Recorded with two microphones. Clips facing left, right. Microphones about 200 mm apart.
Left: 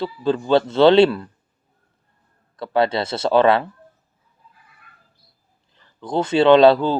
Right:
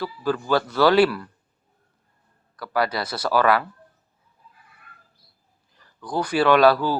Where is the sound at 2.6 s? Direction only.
25° left (ahead or behind).